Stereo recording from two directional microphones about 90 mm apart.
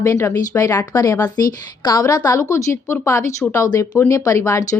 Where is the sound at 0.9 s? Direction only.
35° left (ahead or behind).